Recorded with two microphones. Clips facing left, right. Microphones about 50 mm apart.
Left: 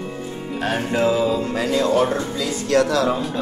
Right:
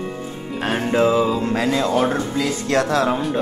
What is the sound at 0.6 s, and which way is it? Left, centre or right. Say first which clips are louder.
Speech: right 2 dB; right.